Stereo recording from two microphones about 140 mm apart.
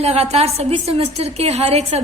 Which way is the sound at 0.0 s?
50° right (ahead or behind).